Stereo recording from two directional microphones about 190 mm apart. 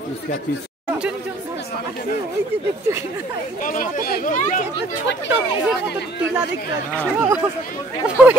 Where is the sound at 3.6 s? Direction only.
45° left (ahead or behind).